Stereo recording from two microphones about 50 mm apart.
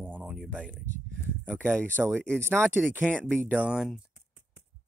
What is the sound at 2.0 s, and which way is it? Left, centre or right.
Speech, centre.